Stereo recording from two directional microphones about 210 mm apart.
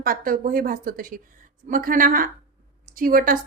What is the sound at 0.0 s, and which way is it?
A woman's voice, 40° right (ahead or behind).